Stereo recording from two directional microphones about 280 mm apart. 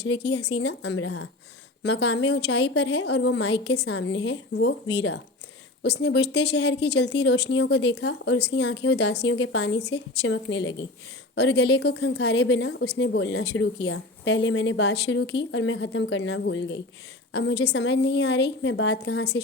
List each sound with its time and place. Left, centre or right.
0.0 s a woman's voice: left
1.8 s a woman's voice: left